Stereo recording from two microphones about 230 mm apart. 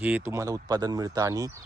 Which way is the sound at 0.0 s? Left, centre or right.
Centre.